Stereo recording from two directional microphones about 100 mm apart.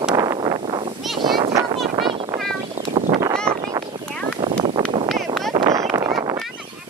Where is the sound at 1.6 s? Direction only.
60° right (ahead or behind).